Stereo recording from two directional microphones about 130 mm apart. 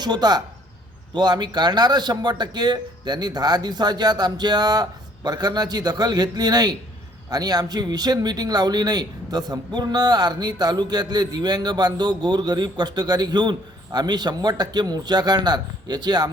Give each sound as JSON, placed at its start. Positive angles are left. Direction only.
{"t": 0.0, "sound": "a man's voice", "side_deg": -35}